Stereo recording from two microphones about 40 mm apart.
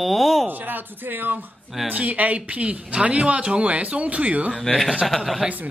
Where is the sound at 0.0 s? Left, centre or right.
Centre.